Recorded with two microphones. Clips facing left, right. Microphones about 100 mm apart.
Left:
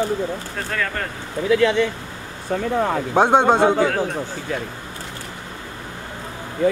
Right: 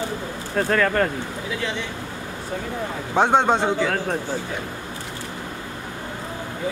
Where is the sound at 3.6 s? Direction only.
50° left (ahead or behind).